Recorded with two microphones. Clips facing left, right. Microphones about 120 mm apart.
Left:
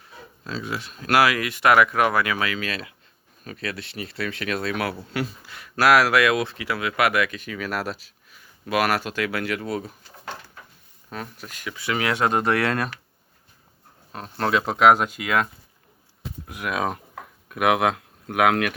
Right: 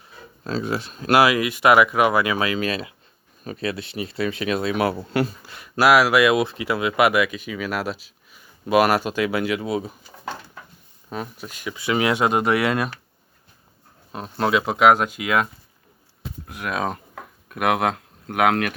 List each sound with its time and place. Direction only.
0.4 s speech: 40° right (ahead or behind); by 4.9 s 15° right (ahead or behind)
4.9 s speech: 35° right (ahead or behind)
5.6 s speech: 10° right (ahead or behind)
8.3 s speech: 20° right (ahead or behind)
11.1 s speech: 15° right (ahead or behind)
14.1 s speech: 15° right (ahead or behind)
16.5 s speech: 10° left (ahead or behind)